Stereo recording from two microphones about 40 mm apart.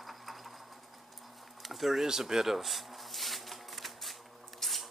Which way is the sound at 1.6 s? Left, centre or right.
Centre.